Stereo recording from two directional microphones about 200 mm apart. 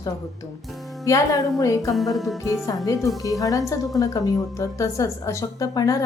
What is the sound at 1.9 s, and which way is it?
Music, centre (ahead or behind).